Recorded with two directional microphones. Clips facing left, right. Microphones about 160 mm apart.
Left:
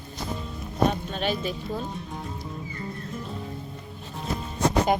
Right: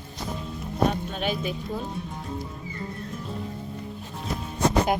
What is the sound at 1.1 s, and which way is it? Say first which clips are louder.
Speech: even; 5° right (ahead or behind).